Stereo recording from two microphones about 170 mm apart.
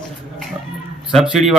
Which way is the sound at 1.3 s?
5° right (ahead or behind).